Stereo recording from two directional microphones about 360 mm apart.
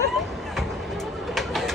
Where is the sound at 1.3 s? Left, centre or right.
Centre.